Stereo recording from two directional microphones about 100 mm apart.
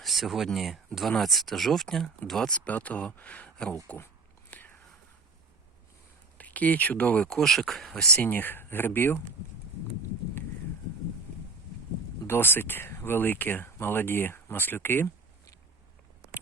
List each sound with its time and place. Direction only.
0.0 s speech: centre (ahead or behind)
2.6 s speech: 15° left (ahead or behind)
3.8 s speech: 25° left (ahead or behind)
4.5 s whispering: 15° left (ahead or behind)
6.3 s speech: 15° left (ahead or behind)
7.3 s speech: 5° left (ahead or behind); by 9.2 s 20° left (ahead or behind)
12.3 s speech: 20° left (ahead or behind)